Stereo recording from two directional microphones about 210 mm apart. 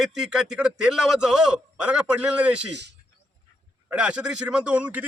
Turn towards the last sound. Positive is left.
turn(degrees=-5)  # may be behind; listen again after turning